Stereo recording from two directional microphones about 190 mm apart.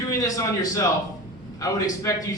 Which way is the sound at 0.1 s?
15° left (ahead or behind).